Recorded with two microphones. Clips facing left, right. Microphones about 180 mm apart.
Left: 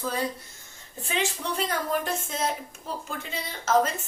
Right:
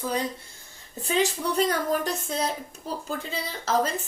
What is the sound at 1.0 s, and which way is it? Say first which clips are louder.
Speech: right 5 dB; 35° right (ahead or behind).